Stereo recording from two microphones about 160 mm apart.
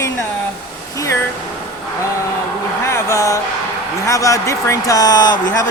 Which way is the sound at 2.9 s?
15° left (ahead or behind).